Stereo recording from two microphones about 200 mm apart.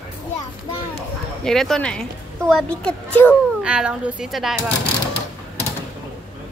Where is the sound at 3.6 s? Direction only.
5° right (ahead or behind).